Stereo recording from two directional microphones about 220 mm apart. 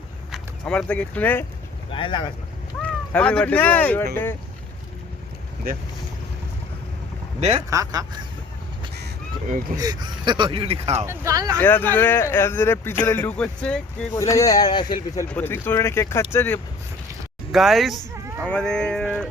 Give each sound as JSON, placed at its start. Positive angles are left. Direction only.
{"t": 0.3, "sound": "speech", "side_deg": 5}
{"t": 1.9, "sound": "speech", "side_deg": 20}
{"t": 2.8, "sound": "speech", "side_deg": 5}
{"t": 7.7, "sound": "speech", "side_deg": -15}
{"t": 9.0, "sound": "crow", "side_deg": -50}
{"t": 9.7, "sound": "speech", "side_deg": -15}
{"t": 11.0, "sound": "speech", "side_deg": -10}
{"t": 11.6, "sound": "speech", "side_deg": 10}
{"t": 17.5, "sound": "speech", "side_deg": 0}